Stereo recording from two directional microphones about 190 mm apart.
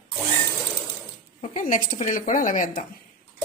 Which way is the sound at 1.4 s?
45° left (ahead or behind).